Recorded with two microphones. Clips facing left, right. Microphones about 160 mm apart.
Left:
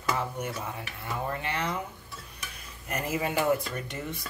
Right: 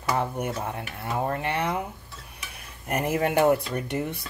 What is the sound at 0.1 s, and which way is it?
Speech, 55° right (ahead or behind).